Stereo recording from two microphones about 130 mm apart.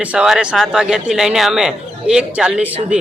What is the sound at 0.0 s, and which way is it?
A man's voice, 10° right (ahead or behind).